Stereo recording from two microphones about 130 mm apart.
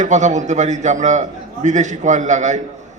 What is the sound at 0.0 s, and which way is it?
A man's voice, 70° right (ahead or behind).